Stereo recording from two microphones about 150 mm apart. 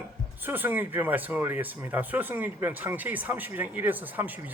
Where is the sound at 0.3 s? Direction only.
15° right (ahead or behind).